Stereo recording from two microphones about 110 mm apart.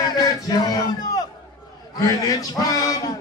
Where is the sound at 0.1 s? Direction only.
40° left (ahead or behind).